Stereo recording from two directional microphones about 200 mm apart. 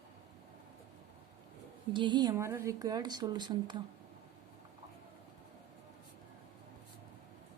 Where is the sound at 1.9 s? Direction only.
25° right (ahead or behind).